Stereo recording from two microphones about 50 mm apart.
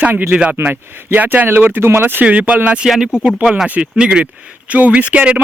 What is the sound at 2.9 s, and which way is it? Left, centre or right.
Speech, centre.